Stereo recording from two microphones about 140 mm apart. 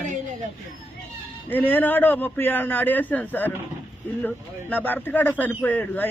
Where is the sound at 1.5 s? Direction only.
15° left (ahead or behind).